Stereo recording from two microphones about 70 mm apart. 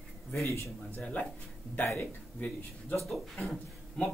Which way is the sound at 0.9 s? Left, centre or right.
Left.